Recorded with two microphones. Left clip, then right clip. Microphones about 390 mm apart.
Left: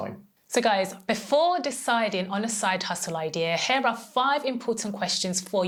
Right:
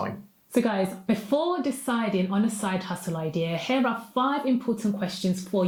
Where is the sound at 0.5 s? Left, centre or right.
Left.